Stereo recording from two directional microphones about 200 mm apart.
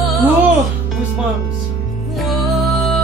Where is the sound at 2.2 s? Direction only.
Centre (ahead or behind).